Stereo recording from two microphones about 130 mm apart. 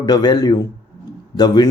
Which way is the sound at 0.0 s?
35° left (ahead or behind).